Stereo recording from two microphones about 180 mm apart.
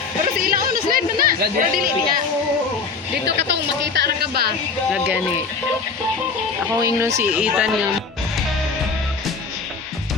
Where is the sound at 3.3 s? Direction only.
70° right (ahead or behind).